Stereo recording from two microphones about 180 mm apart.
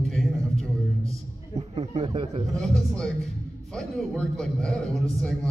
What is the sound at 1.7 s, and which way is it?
Speech, 30° right (ahead or behind).